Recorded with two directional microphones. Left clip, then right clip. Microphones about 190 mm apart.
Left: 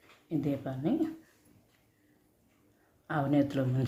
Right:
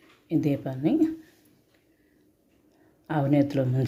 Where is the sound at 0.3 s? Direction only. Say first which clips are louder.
Right 7 dB; 35° right (ahead or behind).